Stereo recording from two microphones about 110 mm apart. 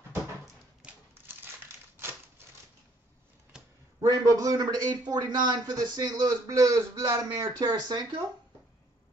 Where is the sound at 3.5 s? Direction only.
5° right (ahead or behind).